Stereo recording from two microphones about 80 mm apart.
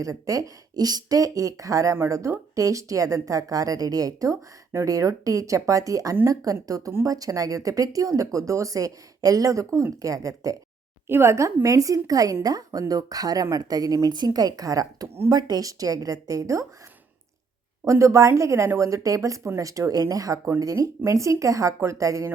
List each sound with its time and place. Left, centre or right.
0.0 s speech: right
11.1 s speech: right
15.3 s speech: right
17.8 s speech: right